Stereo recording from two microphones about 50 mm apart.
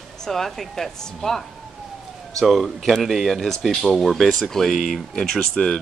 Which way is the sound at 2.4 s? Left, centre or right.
Centre.